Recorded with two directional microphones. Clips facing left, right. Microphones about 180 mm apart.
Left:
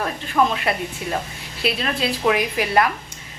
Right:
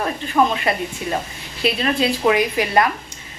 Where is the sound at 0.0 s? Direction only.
Centre (ahead or behind).